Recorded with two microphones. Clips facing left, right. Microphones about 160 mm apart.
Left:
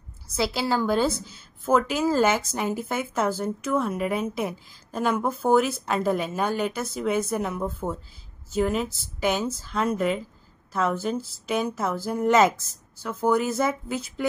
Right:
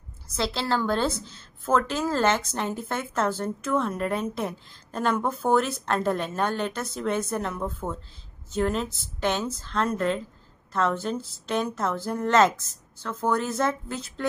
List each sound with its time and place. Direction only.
0.4 s a woman's voice: 10° left (ahead or behind)